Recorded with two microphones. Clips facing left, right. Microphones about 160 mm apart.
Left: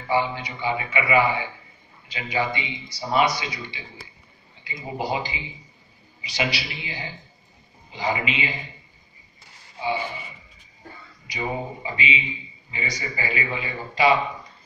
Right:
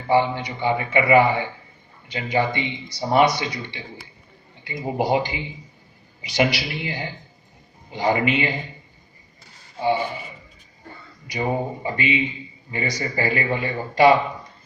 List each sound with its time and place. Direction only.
0.1 s a man's voice: 55° right (ahead or behind)
9.8 s speech: 55° right (ahead or behind)
11.3 s a man's voice: 50° right (ahead or behind)